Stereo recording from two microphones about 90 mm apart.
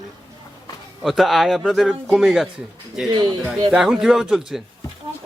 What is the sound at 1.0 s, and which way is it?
Speech, centre (ahead or behind).